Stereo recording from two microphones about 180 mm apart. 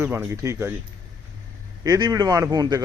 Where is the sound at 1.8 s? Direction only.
20° right (ahead or behind).